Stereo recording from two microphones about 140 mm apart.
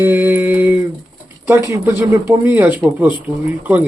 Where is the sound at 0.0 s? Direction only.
20° right (ahead or behind).